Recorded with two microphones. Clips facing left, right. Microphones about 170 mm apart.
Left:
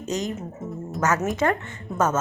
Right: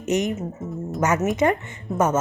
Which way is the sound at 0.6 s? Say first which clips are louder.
Right 1 dB; centre (ahead or behind).